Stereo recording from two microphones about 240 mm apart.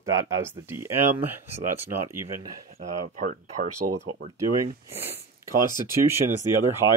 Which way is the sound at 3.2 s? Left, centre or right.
Right.